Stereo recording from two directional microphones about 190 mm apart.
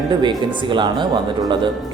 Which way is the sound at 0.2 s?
25° right (ahead or behind).